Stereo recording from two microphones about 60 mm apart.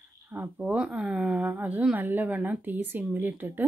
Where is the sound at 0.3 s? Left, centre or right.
Right.